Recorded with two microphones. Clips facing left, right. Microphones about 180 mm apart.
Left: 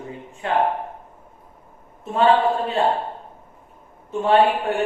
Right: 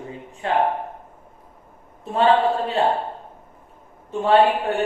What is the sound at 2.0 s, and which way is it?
Speech, 35° right (ahead or behind).